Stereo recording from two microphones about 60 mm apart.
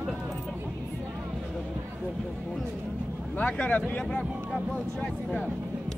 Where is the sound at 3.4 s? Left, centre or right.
Left.